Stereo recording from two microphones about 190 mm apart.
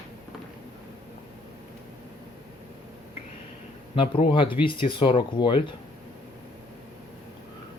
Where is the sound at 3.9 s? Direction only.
25° left (ahead or behind).